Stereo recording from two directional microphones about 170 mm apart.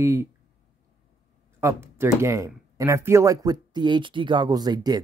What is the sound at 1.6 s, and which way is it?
Speech, 15° right (ahead or behind).